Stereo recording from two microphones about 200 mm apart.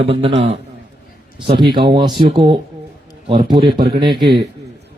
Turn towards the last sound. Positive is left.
turn(degrees=-25)  # may be behind; listen again after turning